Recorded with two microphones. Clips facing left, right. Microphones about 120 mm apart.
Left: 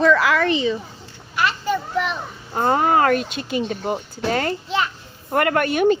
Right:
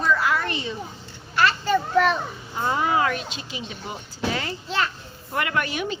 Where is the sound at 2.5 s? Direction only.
50° left (ahead or behind).